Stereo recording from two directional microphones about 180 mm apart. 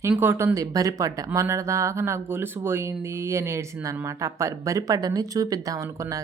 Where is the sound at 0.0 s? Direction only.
10° right (ahead or behind).